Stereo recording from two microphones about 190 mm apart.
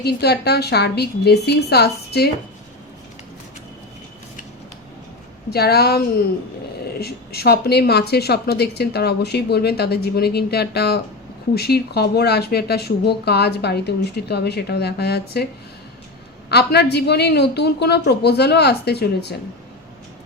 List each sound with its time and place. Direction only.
0.0 s a woman's voice: 60° left (ahead or behind)
5.5 s a woman's voice: 55° left (ahead or behind)
7.0 s a woman's voice: 55° left (ahead or behind)
16.5 s a woman's voice: 60° left (ahead or behind)